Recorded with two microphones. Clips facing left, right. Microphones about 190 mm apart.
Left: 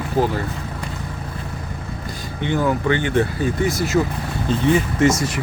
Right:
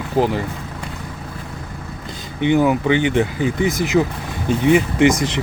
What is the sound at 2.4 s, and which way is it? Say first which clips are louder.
Speech: right 5 dB; 15° right (ahead or behind).